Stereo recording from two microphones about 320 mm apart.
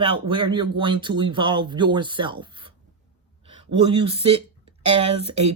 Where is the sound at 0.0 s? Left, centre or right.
Centre.